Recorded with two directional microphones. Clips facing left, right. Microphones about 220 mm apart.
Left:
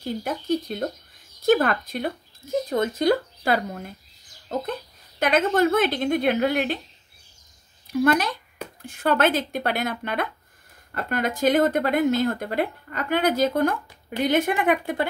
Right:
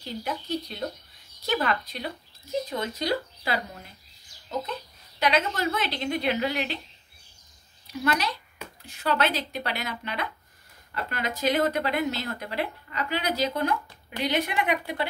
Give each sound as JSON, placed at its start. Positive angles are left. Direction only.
{"t": 0.0, "sound": "speech", "side_deg": 50}
{"t": 7.8, "sound": "speech", "side_deg": 50}